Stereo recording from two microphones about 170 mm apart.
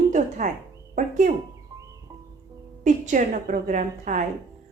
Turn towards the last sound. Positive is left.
turn(degrees=-50)  # may be behind; listen again after turning